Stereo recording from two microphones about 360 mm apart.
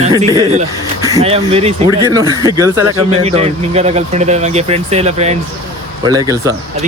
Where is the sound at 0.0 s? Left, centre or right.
Centre.